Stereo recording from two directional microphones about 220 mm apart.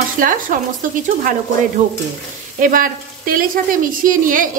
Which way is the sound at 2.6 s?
40° right (ahead or behind).